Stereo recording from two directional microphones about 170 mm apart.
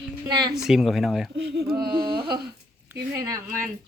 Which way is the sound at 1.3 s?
90° right.